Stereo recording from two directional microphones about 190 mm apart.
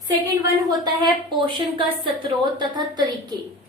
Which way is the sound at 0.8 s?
25° right (ahead or behind).